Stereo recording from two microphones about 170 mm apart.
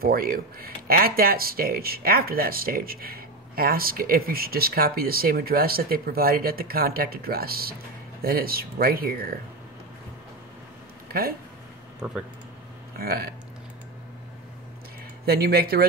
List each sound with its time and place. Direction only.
0.0 s speech: 60° right (ahead or behind)
11.1 s speech: 60° right (ahead or behind)
12.0 s speech: 5° right (ahead or behind)
12.9 s speech: 65° right (ahead or behind)
15.2 s speech: 65° right (ahead or behind)